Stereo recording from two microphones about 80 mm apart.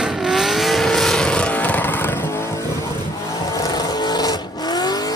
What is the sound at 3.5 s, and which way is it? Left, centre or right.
Vehicle, left.